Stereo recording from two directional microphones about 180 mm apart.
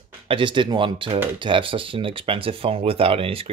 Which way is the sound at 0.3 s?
25° right (ahead or behind).